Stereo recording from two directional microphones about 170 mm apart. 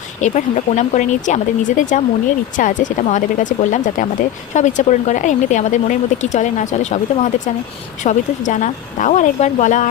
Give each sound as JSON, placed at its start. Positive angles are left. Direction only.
{"t": 0.2, "sound": "speech", "side_deg": 45}